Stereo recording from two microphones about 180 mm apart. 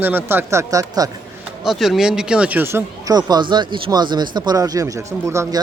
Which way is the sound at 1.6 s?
Centre (ahead or behind).